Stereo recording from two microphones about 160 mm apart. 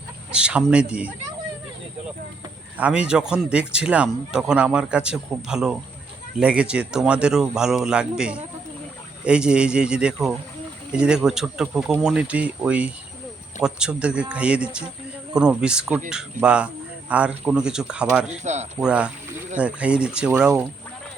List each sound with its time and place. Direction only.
0.3 s speech: 5° right (ahead or behind)
2.7 s speech: 10° right (ahead or behind)
18.4 s speech: 45° right (ahead or behind)
18.8 s speech: 5° right (ahead or behind)